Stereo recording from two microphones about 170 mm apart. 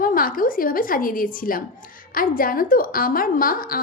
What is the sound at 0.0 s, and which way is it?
A woman's voice, 55° left (ahead or behind).